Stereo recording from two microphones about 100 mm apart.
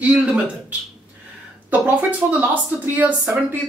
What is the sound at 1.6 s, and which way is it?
Speech, 15° right (ahead or behind).